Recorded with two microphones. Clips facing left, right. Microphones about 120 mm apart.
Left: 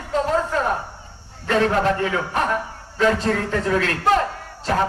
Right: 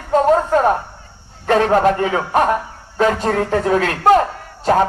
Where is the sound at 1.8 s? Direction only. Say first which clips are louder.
Right 5 dB; 50° right (ahead or behind).